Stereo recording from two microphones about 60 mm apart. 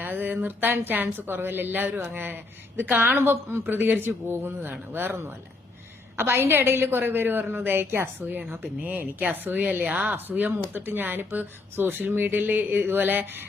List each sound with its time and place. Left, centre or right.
0.0 s speech: right
6.1 s speech: right